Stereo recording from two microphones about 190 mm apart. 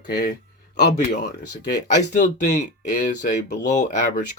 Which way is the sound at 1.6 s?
60° left (ahead or behind).